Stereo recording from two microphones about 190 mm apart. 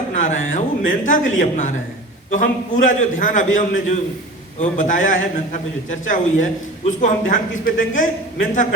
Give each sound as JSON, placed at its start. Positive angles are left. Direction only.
{"t": 0.2, "sound": "a man's voice", "side_deg": 40}